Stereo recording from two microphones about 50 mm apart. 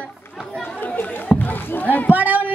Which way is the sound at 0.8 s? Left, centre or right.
Left.